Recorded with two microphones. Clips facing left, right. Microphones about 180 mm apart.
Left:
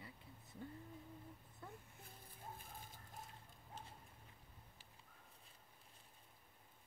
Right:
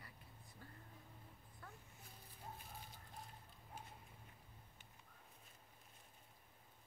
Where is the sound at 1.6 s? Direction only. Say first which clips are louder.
Left 4 dB; 20° left (ahead or behind).